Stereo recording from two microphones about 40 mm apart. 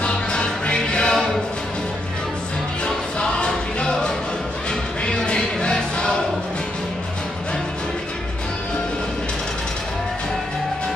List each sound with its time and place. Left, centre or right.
0.0 s music: left
3.2 s music: left
5.0 s choir: left